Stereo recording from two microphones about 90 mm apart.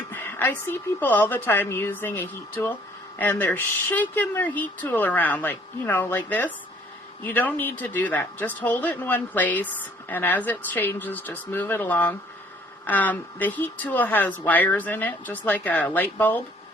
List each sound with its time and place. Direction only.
0.1 s speech: 25° left (ahead or behind)